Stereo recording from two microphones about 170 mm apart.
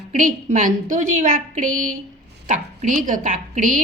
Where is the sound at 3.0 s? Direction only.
50° right (ahead or behind).